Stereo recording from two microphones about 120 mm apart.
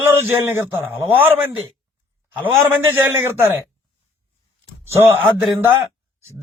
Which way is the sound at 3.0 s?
20° right (ahead or behind).